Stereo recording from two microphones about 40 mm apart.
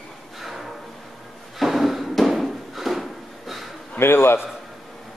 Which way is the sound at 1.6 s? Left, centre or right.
Centre.